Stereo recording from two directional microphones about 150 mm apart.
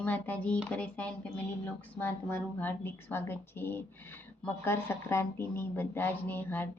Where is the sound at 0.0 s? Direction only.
10° left (ahead or behind).